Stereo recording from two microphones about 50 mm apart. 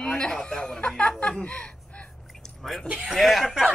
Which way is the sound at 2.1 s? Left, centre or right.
Centre.